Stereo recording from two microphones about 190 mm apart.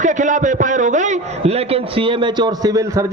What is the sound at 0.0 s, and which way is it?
A man's voice, 40° right (ahead or behind).